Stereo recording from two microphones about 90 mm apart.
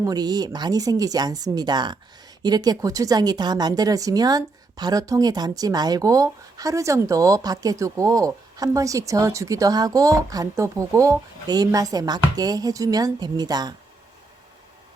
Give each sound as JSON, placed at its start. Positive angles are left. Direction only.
{"t": 0.0, "sound": "speech", "side_deg": -45}